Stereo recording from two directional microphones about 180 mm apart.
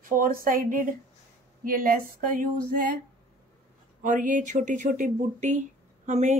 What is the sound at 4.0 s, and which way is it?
Speech, 45° right (ahead or behind).